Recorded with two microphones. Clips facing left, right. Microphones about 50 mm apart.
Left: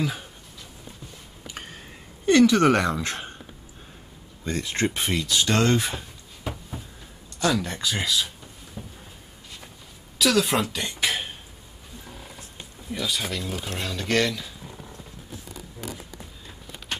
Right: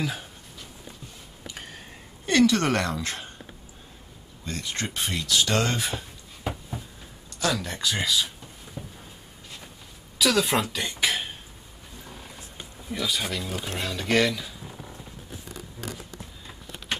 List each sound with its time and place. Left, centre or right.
0.0 s speech: centre
2.3 s a woman's voice: centre
3.0 s speech: left
4.6 s a woman's voice: centre
4.9 s speech: left
5.3 s speech: centre
7.3 s speech: centre
8.8 s a sound: centre
10.1 s speech: centre
12.1 s wild animals: centre
12.9 s speech: centre